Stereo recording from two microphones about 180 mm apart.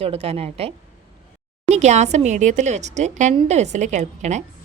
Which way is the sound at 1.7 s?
40° right (ahead or behind).